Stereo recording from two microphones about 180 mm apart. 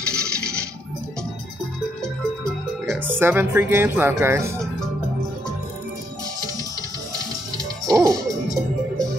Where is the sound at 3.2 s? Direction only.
10° right (ahead or behind).